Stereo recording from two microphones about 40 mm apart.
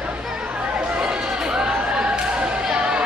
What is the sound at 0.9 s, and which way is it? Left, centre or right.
Run, right.